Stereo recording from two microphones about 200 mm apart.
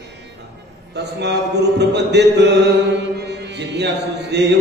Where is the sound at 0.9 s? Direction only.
55° right (ahead or behind).